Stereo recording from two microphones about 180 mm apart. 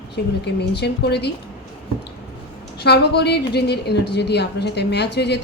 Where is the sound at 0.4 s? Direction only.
70° left (ahead or behind).